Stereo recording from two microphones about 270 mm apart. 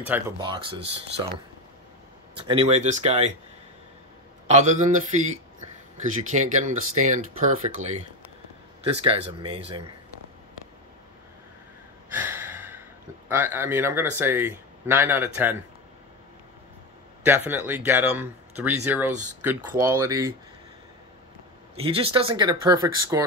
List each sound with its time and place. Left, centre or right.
0.0 s speech: centre
0.5 s speech: centre
4.5 s speech: right
6.3 s speech: right
12.1 s gasp: centre
13.3 s speech: centre
17.2 s speech: centre
21.7 s speech: centre